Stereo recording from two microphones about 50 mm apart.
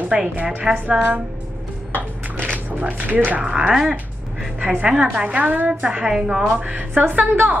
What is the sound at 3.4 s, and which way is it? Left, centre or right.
Speech, centre.